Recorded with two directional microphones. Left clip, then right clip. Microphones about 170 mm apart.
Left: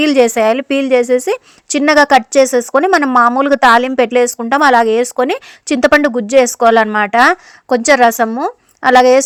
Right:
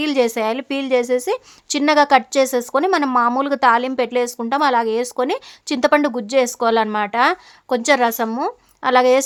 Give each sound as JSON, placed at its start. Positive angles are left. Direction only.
{"t": 0.0, "sound": "a woman's voice", "side_deg": 35}